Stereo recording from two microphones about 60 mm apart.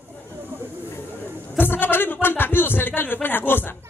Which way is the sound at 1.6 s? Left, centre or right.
Left.